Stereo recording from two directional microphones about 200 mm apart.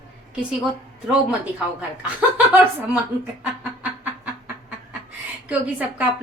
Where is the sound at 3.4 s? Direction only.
10° right (ahead or behind).